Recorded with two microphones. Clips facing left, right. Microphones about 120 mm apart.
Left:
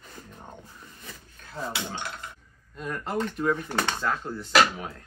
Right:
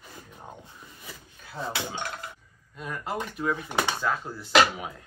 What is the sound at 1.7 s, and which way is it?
Speech, 40° right (ahead or behind).